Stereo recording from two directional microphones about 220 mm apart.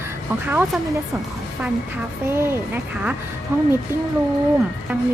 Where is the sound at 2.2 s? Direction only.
10° right (ahead or behind).